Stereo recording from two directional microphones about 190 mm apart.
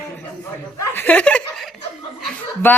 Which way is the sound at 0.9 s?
10° left (ahead or behind).